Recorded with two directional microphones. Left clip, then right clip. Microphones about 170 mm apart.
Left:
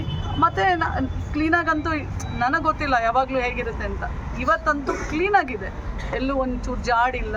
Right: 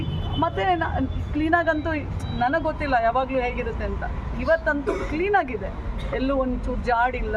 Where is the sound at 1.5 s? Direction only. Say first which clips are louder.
Even; 15° right (ahead or behind).